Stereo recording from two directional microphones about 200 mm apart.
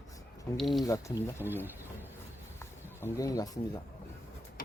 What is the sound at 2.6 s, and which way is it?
Speech, 10° left (ahead or behind).